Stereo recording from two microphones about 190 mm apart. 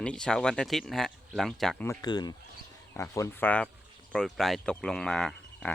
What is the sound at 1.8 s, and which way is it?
Speech, 15° left (ahead or behind).